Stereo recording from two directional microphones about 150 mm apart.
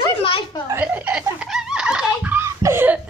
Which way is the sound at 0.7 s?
10° right (ahead or behind).